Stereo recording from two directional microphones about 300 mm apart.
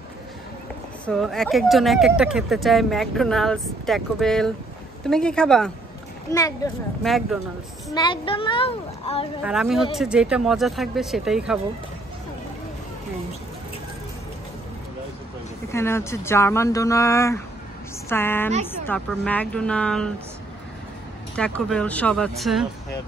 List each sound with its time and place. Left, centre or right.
1.0 s speech: centre
7.0 s speech: centre
7.9 s speech: centre
9.4 s speech: centre
15.7 s speech: centre
21.4 s speech: centre